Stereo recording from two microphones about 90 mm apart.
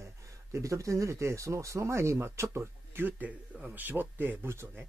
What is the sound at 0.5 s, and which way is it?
Speech, 35° right (ahead or behind).